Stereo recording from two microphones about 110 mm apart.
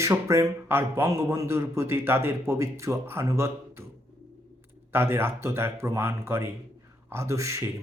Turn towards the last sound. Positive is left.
turn(degrees=-25)  # may be behind; listen again after turning